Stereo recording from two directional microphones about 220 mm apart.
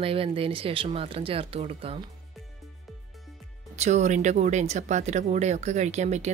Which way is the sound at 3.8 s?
30° right (ahead or behind).